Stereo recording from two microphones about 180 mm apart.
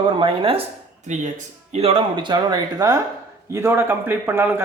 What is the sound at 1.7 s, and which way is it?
Speech, 30° right (ahead or behind).